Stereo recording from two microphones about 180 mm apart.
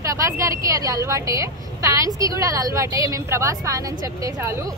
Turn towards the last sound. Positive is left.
turn(degrees=-15)  # may be behind; listen again after turning